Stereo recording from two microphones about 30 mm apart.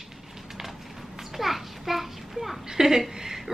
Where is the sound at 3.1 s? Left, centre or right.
Centre.